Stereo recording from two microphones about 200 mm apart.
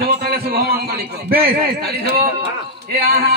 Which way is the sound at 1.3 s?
50° right (ahead or behind).